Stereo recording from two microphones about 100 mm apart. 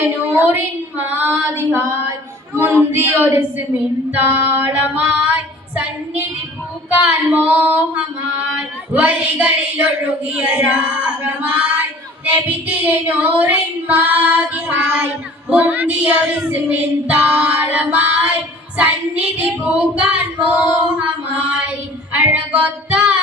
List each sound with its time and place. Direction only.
0.0 s child singing: 25° right (ahead or behind)
4.3 s female singing: 15° right (ahead or behind)